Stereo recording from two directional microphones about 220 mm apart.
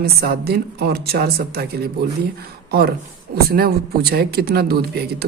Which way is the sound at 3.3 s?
45° right (ahead or behind).